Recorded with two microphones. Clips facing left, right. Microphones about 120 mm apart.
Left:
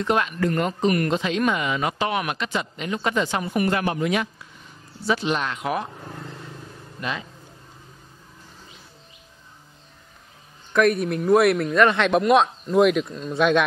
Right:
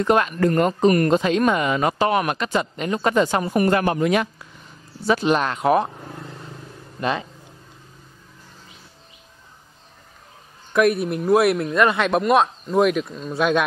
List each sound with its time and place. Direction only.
0.0 s speech: 45° right (ahead or behind)
7.0 s speech: 40° right (ahead or behind)
10.7 s speech: 5° right (ahead or behind)